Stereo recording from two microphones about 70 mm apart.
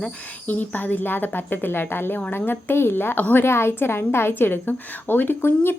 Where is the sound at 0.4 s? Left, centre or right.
Left.